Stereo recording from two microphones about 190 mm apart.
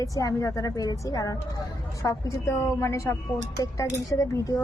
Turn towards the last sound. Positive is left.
turn(degrees=15)  # may be behind; listen again after turning